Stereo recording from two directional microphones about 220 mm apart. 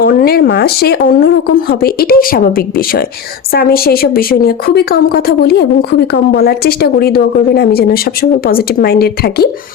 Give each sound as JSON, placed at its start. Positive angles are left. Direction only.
{"t": 0.0, "sound": "a woman's voice", "side_deg": 40}